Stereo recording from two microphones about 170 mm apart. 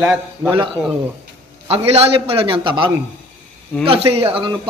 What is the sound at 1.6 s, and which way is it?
A man's voice, 35° right (ahead or behind).